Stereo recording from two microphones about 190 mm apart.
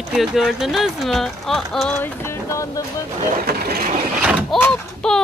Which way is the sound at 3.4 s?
55° right (ahead or behind).